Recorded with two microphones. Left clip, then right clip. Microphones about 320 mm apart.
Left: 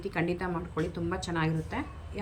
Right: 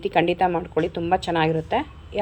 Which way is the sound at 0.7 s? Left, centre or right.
Right.